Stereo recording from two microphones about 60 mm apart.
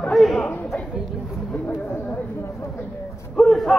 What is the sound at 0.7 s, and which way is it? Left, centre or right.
Speech, left.